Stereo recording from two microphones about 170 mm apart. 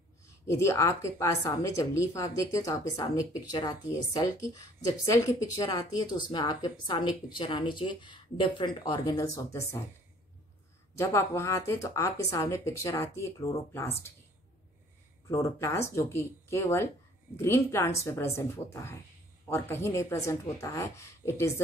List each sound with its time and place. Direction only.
0.5 s speech: 15° left (ahead or behind)
11.0 s speech: 15° left (ahead or behind)
15.2 s speech: 15° left (ahead or behind)